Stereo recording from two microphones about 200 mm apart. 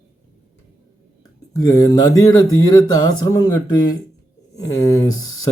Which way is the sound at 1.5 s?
15° left (ahead or behind).